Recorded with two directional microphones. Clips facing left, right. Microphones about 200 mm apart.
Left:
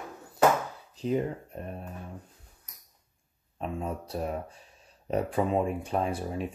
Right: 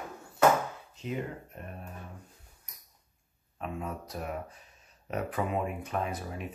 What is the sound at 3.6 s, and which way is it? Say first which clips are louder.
Speech: left 3 dB; 30° left (ahead or behind).